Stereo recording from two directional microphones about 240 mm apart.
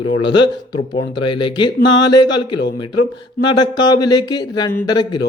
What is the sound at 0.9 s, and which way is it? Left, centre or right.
Speech, left.